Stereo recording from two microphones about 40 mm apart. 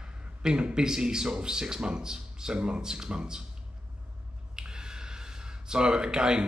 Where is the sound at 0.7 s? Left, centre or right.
Centre.